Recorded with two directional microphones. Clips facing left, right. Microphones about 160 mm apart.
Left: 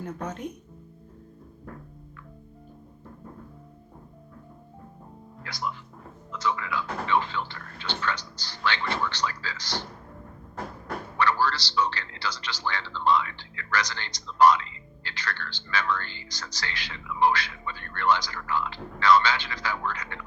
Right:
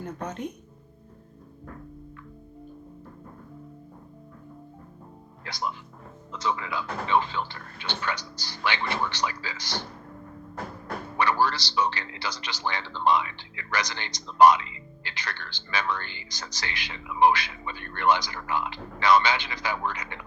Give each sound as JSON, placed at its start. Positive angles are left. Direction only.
{"t": 0.0, "sound": "speech", "side_deg": 5}
{"t": 5.4, "sound": "music", "side_deg": -20}
{"t": 6.3, "sound": "a man's voice", "side_deg": -25}
{"t": 11.2, "sound": "a man's voice", "side_deg": -15}